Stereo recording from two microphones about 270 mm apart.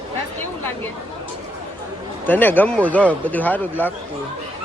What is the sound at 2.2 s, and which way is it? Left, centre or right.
Speech, centre.